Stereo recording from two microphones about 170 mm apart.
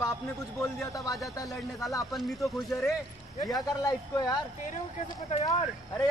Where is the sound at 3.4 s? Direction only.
20° left (ahead or behind).